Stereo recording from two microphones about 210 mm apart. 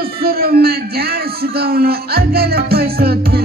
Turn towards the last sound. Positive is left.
turn(degrees=-45)  # may be behind; listen again after turning